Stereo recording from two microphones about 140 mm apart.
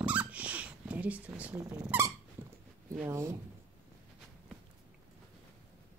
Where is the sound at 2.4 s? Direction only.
15° right (ahead or behind).